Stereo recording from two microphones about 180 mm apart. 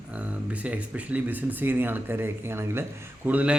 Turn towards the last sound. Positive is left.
turn(degrees=-5)  # may be behind; listen again after turning